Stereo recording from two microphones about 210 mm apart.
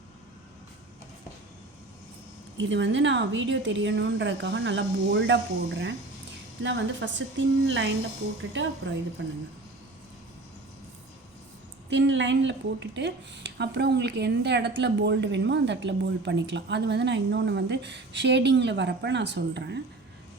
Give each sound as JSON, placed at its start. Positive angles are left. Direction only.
{"t": 2.6, "sound": "a woman's voice", "side_deg": -60}
{"t": 11.9, "sound": "a woman's voice", "side_deg": -60}